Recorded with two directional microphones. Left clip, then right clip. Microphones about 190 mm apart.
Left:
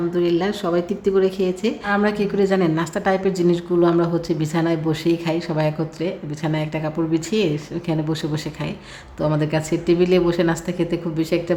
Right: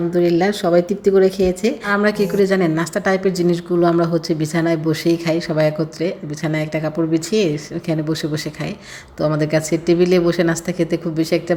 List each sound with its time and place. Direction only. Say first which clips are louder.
0.1 s a woman's voice: right 7 dB; 20° right (ahead or behind)